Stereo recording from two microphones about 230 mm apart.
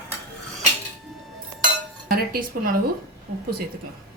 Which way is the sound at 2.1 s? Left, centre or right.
Right.